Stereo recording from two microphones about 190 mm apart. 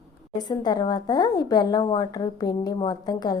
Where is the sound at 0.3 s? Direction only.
20° left (ahead or behind).